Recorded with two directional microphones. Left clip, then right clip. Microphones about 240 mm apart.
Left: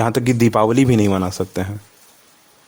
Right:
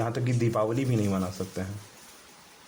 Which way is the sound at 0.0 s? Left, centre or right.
Left.